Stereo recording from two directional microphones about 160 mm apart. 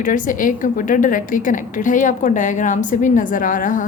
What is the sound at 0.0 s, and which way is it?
A woman's voice, 55° left (ahead or behind).